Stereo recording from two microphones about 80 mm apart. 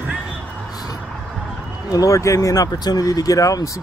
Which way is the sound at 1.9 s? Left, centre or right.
Left.